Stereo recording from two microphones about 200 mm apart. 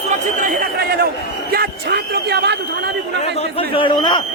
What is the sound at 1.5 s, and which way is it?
A man's voice, 50° right (ahead or behind).